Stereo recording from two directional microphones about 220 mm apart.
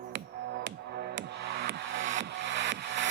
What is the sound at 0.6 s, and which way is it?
Music, 40° right (ahead or behind).